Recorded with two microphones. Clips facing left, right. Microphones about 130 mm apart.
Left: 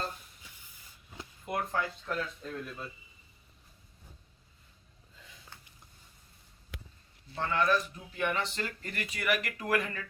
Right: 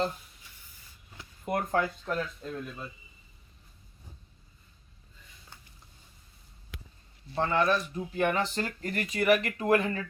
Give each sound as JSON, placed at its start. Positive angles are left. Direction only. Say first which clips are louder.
{"t": 1.5, "sound": "speech", "louder": "right 5 dB", "side_deg": -45}
{"t": 7.3, "sound": "speech", "louder": "right 3 dB", "side_deg": -30}